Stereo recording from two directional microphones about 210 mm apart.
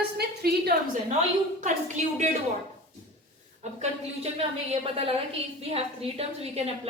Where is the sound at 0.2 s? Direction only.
50° right (ahead or behind).